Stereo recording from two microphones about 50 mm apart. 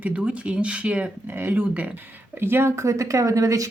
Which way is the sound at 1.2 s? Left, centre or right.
Right.